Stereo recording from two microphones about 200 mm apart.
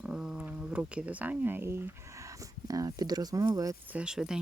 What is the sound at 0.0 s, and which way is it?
Speech, 5° right (ahead or behind).